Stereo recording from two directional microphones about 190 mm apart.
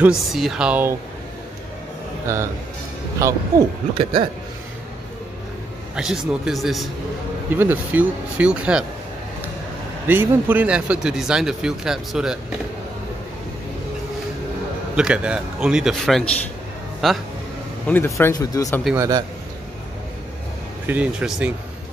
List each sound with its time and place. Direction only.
0.0 s speech: centre (ahead or behind)
3.2 s speech: 15° right (ahead or behind)
4.0 s a man's voice: 30° right (ahead or behind)
5.9 s speech: 5° right (ahead or behind)
7.5 s speech: 10° right (ahead or behind)
10.0 s speech: 10° right (ahead or behind)
15.0 s speech: 5° right (ahead or behind)
17.8 s speech: 10° left (ahead or behind)
18.9 s a man's voice: 20° right (ahead or behind)
20.8 s speech: 10° right (ahead or behind)